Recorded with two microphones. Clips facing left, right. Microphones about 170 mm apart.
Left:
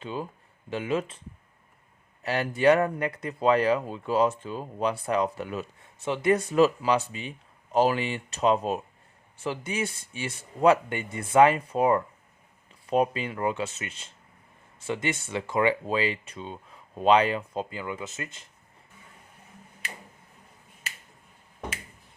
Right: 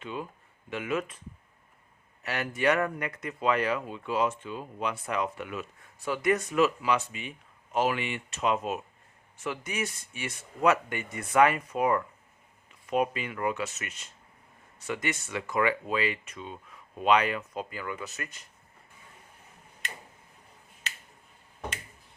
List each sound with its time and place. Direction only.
0.0 s a sound: 30° left (ahead or behind)
0.7 s speech: 30° left (ahead or behind)
2.2 s speech: 30° left (ahead or behind)